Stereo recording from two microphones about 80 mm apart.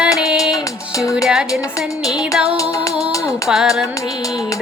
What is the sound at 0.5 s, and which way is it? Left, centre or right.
Music, left.